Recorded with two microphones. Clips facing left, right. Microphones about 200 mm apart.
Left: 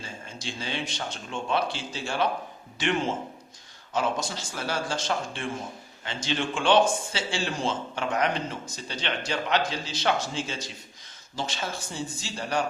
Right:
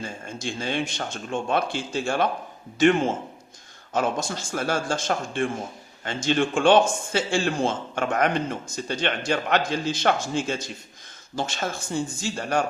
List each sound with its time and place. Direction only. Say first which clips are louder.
0.0 s speech: right 6 dB; 50° right (ahead or behind)